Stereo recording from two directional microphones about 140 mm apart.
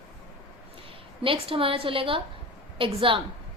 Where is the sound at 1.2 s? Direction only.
40° right (ahead or behind).